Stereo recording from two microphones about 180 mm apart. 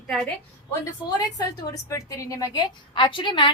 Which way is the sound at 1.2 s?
20° left (ahead or behind).